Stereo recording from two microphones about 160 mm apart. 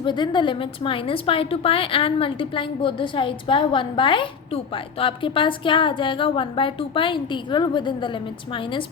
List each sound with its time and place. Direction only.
0.0 s a woman's voice: 30° left (ahead or behind)